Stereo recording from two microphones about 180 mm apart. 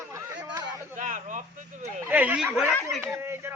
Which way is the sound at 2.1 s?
10° right (ahead or behind).